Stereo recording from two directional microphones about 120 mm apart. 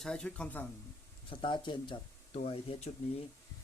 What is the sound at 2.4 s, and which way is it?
Speech, 60° left (ahead or behind).